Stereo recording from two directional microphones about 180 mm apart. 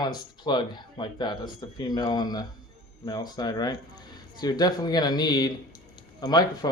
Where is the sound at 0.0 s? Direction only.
25° left (ahead or behind).